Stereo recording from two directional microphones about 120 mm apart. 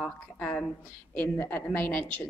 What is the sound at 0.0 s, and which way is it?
A woman's voice, 15° left (ahead or behind).